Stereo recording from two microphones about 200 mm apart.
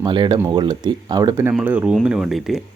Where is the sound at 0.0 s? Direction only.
20° right (ahead or behind).